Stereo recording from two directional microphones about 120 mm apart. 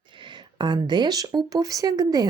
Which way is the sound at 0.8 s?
35° right (ahead or behind).